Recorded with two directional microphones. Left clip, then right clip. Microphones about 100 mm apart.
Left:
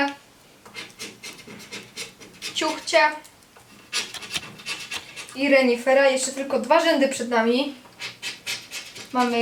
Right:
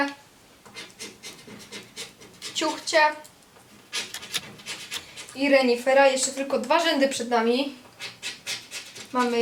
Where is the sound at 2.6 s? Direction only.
10° right (ahead or behind).